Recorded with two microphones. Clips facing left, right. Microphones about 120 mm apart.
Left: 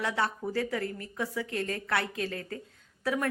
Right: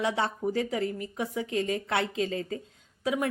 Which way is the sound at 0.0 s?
20° right (ahead or behind).